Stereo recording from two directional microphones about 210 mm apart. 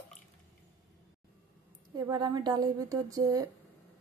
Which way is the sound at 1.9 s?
20° right (ahead or behind).